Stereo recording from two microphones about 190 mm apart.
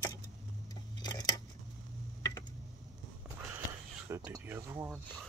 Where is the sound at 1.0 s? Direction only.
20° left (ahead or behind).